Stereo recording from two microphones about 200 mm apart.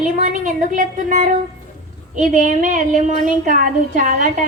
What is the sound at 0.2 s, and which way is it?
Speech, 40° right (ahead or behind).